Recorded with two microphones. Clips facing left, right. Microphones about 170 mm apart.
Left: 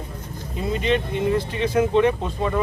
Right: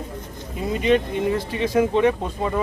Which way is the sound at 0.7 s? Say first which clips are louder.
Right 3 dB; 5° right (ahead or behind).